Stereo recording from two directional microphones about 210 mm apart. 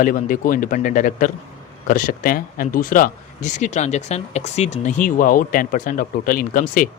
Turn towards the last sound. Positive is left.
turn(degrees=40)  # may be behind; listen again after turning